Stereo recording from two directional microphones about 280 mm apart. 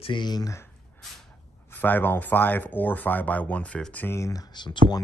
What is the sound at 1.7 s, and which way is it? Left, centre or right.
Speech, centre.